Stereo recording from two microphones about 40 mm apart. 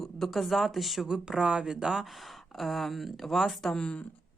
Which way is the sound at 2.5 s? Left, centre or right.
Centre.